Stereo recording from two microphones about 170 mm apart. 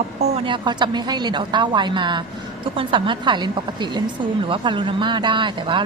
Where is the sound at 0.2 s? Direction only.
35° right (ahead or behind).